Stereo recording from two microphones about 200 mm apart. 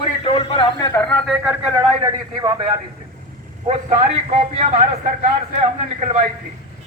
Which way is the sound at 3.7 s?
35° right (ahead or behind).